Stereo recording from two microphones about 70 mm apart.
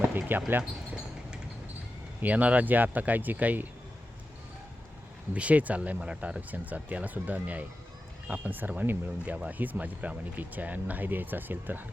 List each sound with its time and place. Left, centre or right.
0.0 s basketball bounce: right
2.2 s speech: right
5.3 s speech: centre